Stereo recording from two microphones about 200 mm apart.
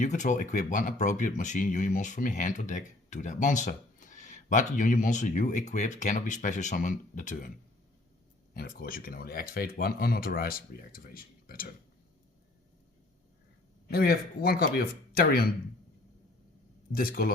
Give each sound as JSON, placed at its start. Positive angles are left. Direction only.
{"t": 0.0, "sound": "speech", "side_deg": 40}
{"t": 8.5, "sound": "speech", "side_deg": 45}
{"t": 13.8, "sound": "speech", "side_deg": 50}
{"t": 16.9, "sound": "speech", "side_deg": 45}